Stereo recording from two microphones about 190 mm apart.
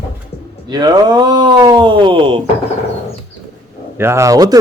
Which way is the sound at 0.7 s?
20° right (ahead or behind).